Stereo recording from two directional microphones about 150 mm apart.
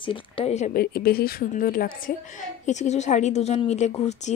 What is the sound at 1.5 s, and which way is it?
Speech, 70° left (ahead or behind).